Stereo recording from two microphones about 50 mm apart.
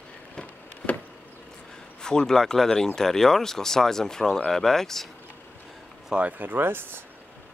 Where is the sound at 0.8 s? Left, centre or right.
Centre.